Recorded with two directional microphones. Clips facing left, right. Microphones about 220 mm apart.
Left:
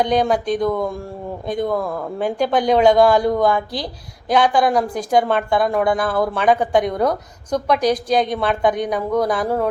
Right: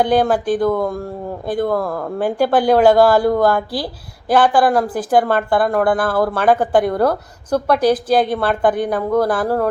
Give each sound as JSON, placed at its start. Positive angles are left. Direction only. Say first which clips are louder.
{"t": 0.0, "sound": "a woman's voice", "louder": "right 2 dB", "side_deg": -5}